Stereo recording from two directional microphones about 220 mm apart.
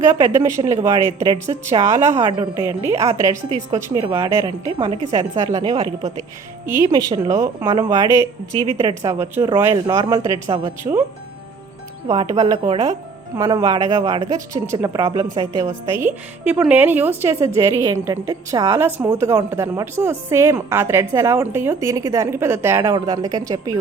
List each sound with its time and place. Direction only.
0.3 s a woman's voice: 10° right (ahead or behind)
12.0 s speech: 15° right (ahead or behind)
13.3 s a woman's voice: 15° right (ahead or behind)
15.6 s a woman's voice: 10° right (ahead or behind)